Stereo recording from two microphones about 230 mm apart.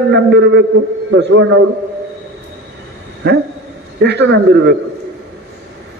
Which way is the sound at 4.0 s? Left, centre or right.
Right.